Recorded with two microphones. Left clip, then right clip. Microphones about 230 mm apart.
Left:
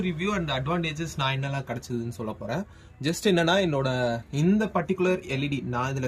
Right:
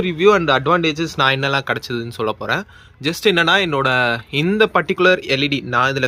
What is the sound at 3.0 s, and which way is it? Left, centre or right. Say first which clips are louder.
Speech: right 8 dB; centre.